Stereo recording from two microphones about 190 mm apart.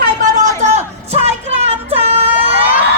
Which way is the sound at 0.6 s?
35° right (ahead or behind).